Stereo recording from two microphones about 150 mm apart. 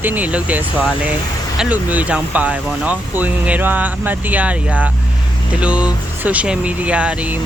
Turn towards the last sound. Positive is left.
turn(degrees=-10)  # may be behind; listen again after turning